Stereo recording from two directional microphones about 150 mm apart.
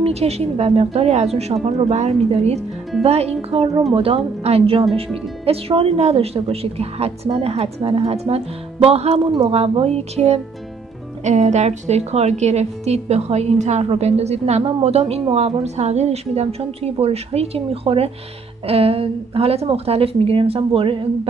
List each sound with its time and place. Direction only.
0.0 s a woman's voice: 45° right (ahead or behind)